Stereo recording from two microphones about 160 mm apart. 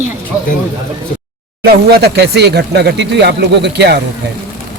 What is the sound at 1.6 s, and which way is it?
Speech, 90° right.